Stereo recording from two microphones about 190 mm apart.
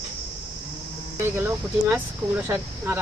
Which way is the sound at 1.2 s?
10° right (ahead or behind).